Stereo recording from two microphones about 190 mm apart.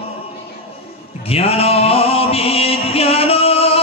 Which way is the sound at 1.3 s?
30° left (ahead or behind).